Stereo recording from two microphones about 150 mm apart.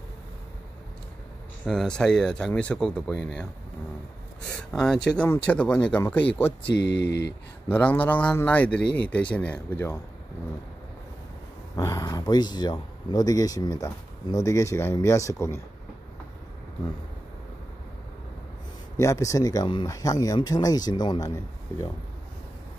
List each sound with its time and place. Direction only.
1.7 s speech: 5° left (ahead or behind)
4.7 s speech: 5° left (ahead or behind)
6.6 s speech: 90° left
7.7 s speech: 10° left (ahead or behind)
11.7 s speech: 25° left (ahead or behind)
18.9 s speech: 20° left (ahead or behind)